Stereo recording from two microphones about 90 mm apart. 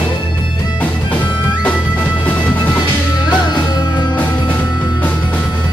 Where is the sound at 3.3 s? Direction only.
55° left (ahead or behind).